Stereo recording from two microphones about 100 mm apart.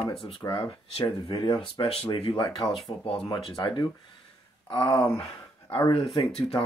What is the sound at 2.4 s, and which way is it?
Speech, 40° left (ahead or behind).